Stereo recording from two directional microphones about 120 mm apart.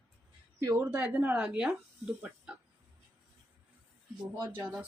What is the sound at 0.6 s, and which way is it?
Speech, 25° right (ahead or behind).